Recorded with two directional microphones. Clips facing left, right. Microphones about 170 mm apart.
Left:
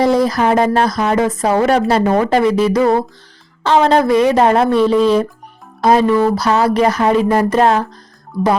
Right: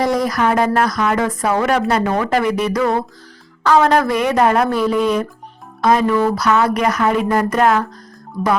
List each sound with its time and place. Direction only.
0.0 s speech: 25° left (ahead or behind)